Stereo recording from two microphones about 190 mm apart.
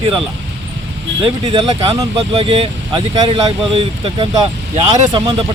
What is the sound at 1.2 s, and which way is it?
Speech, 30° right (ahead or behind).